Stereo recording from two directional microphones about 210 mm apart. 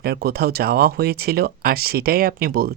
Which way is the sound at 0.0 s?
45° right (ahead or behind).